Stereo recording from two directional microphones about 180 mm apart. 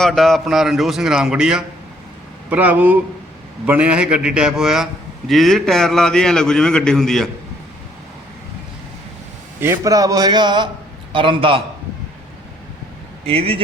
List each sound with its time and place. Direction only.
0.0 s a man's voice: centre (ahead or behind)
9.6 s a man's voice: 15° right (ahead or behind)
13.2 s speech: 30° right (ahead or behind)